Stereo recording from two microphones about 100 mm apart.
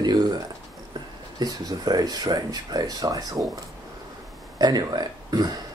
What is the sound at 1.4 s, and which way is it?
Speech, 40° right (ahead or behind).